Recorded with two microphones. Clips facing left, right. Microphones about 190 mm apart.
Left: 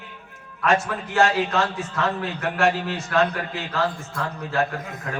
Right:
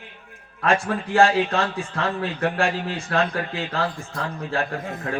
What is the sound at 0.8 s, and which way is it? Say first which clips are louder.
A man's voice: right 3 dB; 35° right (ahead or behind).